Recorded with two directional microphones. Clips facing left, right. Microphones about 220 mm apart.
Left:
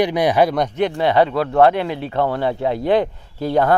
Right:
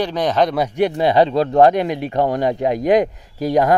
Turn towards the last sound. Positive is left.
turn(degrees=-10)  # may be behind; listen again after turning